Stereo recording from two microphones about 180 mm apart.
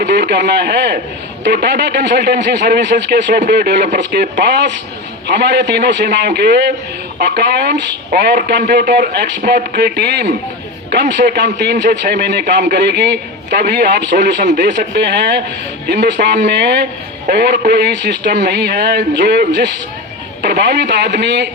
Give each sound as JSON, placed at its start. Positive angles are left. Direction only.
{"t": 0.0, "sound": "speech", "side_deg": -65}
{"t": 9.4, "sound": "speech", "side_deg": -55}
{"t": 17.2, "sound": "speech", "side_deg": -60}